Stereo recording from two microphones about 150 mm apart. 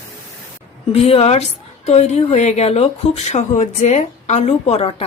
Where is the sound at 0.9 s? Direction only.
40° left (ahead or behind).